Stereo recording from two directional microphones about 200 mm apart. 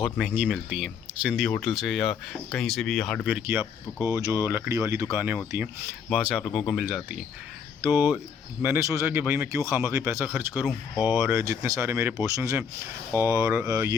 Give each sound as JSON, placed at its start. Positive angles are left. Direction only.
{"t": 0.0, "sound": "speech", "side_deg": -5}
{"t": 3.9, "sound": "speech", "side_deg": 15}
{"t": 4.4, "sound": "speech", "side_deg": -10}
{"t": 7.9, "sound": "speech", "side_deg": 20}
{"t": 8.6, "sound": "speech", "side_deg": -10}
{"t": 10.9, "sound": "speech", "side_deg": 20}
{"t": 11.2, "sound": "speech", "side_deg": -15}